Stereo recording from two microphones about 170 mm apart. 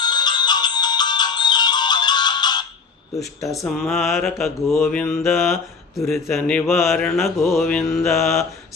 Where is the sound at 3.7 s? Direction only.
Centre (ahead or behind).